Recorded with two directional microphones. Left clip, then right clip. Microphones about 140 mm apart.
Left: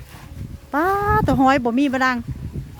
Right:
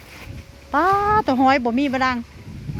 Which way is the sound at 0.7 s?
40° left (ahead or behind).